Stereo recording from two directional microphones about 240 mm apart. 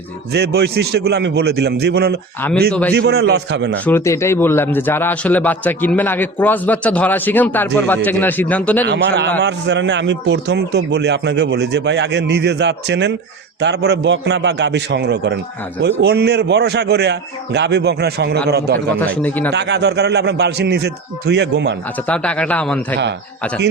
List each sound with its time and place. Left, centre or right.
0.3 s a man's voice: right
3.8 s a man's voice: centre
8.9 s a man's voice: right
18.9 s a man's voice: centre
19.5 s a man's voice: right
21.9 s speech: centre